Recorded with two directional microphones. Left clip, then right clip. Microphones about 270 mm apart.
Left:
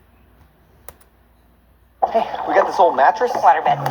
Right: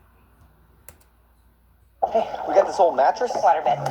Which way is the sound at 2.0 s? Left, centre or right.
Left.